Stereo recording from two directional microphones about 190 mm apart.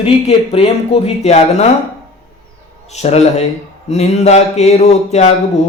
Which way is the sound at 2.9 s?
35° left (ahead or behind).